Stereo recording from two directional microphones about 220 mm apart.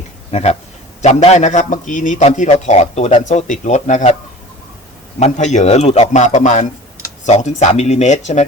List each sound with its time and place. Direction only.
0.3 s a man's voice: 30° left (ahead or behind)
5.2 s a man's voice: 30° left (ahead or behind)